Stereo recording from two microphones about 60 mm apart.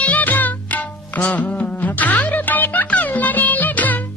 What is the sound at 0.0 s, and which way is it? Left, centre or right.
Music, left.